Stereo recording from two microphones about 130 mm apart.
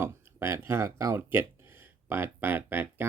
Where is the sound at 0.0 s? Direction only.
20° right (ahead or behind).